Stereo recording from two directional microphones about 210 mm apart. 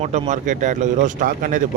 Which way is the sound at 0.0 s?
35° right (ahead or behind).